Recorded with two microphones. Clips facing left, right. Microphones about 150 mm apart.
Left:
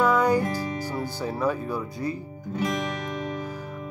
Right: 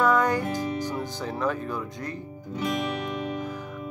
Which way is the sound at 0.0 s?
10° left (ahead or behind).